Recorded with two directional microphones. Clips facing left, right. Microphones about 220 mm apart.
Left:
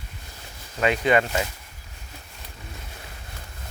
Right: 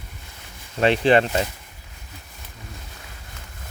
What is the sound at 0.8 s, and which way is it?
Speech, 30° right (ahead or behind).